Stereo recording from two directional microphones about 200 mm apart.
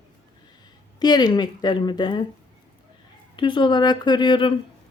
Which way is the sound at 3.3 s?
25° left (ahead or behind).